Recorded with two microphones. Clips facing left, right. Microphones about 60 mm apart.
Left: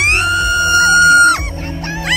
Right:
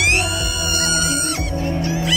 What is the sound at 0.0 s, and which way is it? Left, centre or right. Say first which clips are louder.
Music: left 6 dB; left.